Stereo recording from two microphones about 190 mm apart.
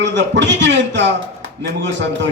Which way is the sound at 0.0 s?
70° right (ahead or behind).